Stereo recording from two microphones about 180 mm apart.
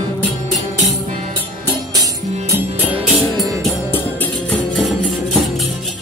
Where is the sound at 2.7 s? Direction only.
30° right (ahead or behind).